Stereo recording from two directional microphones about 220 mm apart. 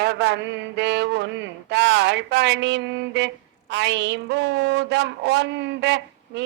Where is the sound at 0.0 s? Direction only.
50° right (ahead or behind).